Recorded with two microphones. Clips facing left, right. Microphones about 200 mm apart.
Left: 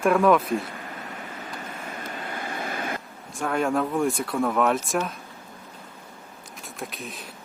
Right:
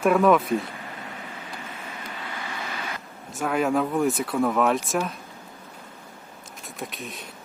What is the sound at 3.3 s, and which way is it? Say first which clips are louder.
Speech: right 1 dB; 5° right (ahead or behind).